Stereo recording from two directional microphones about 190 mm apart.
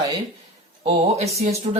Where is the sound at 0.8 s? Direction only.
35° right (ahead or behind).